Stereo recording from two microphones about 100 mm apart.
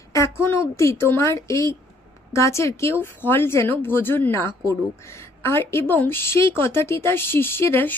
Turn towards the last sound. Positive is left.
turn(degrees=20)  # may be behind; listen again after turning